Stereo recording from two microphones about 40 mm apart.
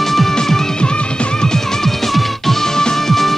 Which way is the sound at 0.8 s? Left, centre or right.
Left.